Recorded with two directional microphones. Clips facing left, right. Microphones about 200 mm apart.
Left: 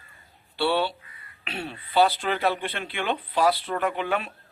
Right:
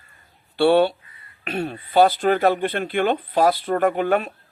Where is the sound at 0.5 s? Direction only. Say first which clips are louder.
Right 9 dB; 50° right (ahead or behind).